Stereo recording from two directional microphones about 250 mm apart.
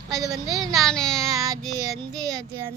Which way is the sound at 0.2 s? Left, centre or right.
Centre.